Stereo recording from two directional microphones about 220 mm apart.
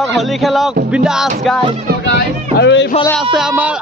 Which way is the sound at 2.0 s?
55° left (ahead or behind).